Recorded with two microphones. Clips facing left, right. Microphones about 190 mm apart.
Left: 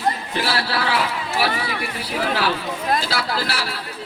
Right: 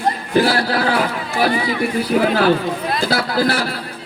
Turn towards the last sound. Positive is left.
turn(degrees=-50)  # may be behind; listen again after turning